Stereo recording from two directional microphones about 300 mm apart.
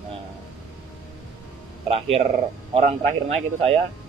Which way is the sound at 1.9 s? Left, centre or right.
Centre.